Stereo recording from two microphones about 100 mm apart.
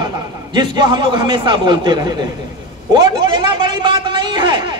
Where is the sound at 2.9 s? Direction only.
50° right (ahead or behind).